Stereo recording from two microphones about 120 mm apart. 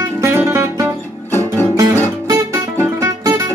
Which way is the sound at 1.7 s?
25° right (ahead or behind).